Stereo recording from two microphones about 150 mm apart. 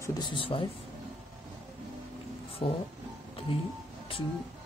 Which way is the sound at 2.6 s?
35° left (ahead or behind).